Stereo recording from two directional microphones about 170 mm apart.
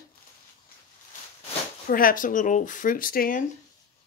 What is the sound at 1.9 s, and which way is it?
Speech, 55° left (ahead or behind).